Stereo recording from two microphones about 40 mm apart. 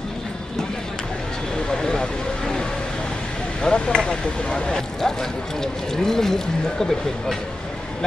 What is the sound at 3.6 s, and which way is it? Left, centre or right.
Speech, centre.